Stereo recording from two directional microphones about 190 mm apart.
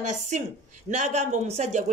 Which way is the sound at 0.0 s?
40° right (ahead or behind).